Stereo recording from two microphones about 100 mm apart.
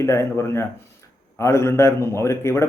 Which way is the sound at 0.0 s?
25° left (ahead or behind).